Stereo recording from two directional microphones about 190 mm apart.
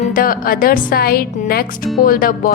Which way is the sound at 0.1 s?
50° left (ahead or behind).